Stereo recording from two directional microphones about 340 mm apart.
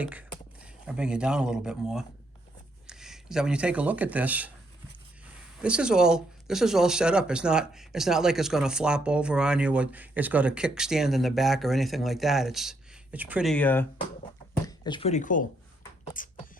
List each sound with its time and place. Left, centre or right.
0.0 s speech: centre; by 15.4 s left
16.2 s beatboxing: left